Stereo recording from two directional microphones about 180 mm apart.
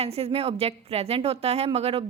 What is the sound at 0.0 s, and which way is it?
A woman's voice, 35° right (ahead or behind).